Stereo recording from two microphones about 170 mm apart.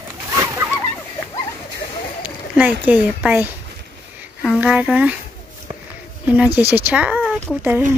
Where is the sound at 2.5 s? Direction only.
10° right (ahead or behind).